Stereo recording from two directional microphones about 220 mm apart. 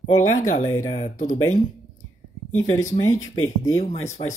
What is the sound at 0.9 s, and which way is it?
Speech, 35° left (ahead or behind).